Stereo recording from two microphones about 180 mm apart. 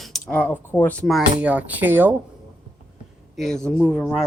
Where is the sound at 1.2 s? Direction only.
5° right (ahead or behind).